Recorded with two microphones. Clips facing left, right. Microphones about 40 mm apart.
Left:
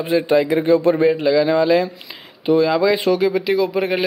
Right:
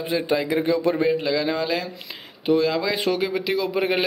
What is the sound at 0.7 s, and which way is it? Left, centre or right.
Speech, left.